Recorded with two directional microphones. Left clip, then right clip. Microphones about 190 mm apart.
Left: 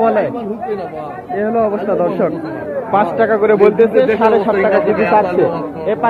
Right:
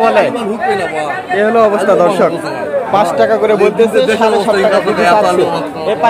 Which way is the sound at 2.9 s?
15° right (ahead or behind).